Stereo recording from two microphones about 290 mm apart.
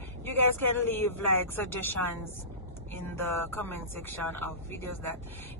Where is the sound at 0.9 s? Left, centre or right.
Centre.